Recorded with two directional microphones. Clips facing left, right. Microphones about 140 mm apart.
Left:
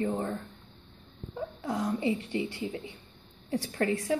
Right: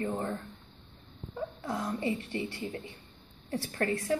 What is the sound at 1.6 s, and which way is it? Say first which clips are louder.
Speech: left 4 dB; 15° left (ahead or behind).